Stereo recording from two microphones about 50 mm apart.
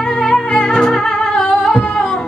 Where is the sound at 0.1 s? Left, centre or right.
Centre.